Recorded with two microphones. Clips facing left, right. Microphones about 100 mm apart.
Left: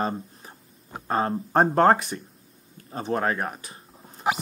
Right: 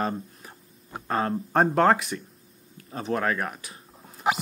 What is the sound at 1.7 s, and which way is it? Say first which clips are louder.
Speech: left 2 dB; 35° left (ahead or behind).